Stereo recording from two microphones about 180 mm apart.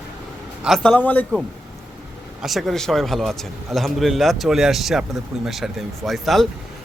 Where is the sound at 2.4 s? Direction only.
Centre (ahead or behind).